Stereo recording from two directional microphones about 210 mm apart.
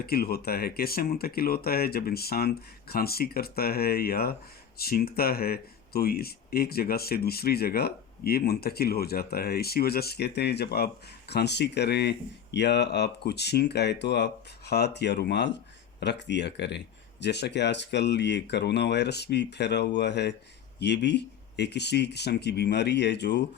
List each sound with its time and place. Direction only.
0.0 s speech: 45° left (ahead or behind)